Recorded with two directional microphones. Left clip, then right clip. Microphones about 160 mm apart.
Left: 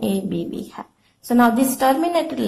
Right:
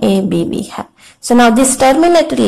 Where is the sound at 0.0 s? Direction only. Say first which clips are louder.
Right 11 dB; 25° right (ahead or behind).